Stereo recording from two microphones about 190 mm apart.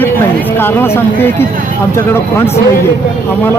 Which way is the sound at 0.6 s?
10° left (ahead or behind).